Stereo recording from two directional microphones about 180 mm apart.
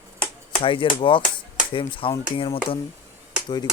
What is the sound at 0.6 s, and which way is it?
Speech, 30° left (ahead or behind).